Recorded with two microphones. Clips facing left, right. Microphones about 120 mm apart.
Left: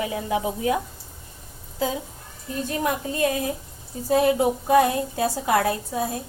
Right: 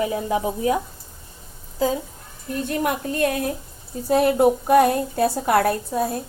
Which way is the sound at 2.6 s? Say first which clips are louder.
Right 2 dB; 60° right (ahead or behind).